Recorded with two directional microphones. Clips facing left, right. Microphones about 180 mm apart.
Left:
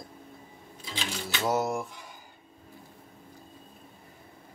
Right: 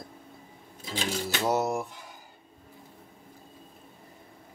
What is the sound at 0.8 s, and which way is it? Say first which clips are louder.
Cash register: right 5 dB; 45° right (ahead or behind).